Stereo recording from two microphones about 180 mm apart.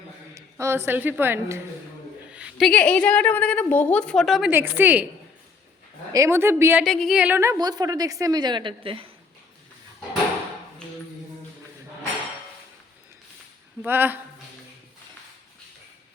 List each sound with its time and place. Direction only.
0.3 s a woman's voice: 15° right (ahead or behind)
6.1 s speech: 15° right (ahead or behind)
6.8 s a woman's voice: centre (ahead or behind); by 9.0 s 30° right (ahead or behind)
13.8 s speech: 10° right (ahead or behind)